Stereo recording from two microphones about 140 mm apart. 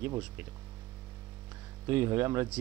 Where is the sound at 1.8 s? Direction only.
15° right (ahead or behind).